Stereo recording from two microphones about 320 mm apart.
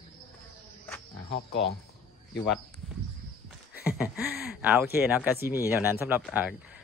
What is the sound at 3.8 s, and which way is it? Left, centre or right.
Speech, centre.